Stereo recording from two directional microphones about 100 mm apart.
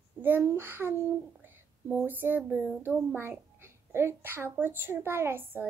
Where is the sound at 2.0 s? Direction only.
20° right (ahead or behind).